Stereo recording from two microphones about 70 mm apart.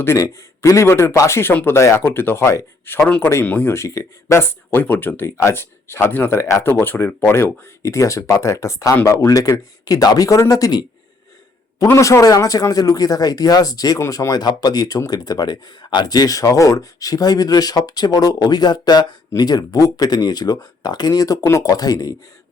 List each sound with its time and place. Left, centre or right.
0.2 s speech: left
3.4 s speech: left
3.8 s speech: left
5.4 s speech: left
7.8 s speech: left
11.9 s speech: left